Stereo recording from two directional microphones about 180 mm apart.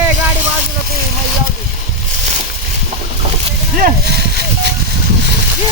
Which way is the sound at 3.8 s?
55° right (ahead or behind).